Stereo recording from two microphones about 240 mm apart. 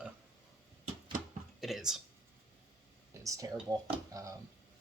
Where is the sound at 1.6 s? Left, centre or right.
Centre.